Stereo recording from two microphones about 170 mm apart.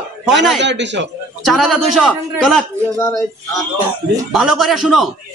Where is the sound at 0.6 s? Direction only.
90° right.